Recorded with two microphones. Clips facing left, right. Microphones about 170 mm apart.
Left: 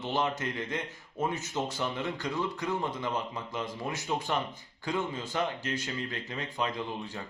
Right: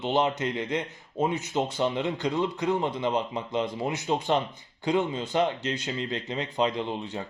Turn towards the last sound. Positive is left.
turn(degrees=-20)  # may be behind; listen again after turning